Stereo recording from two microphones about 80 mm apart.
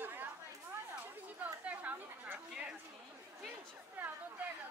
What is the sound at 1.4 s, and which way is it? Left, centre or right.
Chatter, centre.